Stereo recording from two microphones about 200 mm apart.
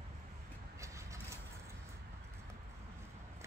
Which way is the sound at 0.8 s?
15° right (ahead or behind).